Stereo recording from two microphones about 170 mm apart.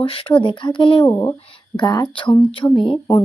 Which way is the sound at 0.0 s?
30° left (ahead or behind).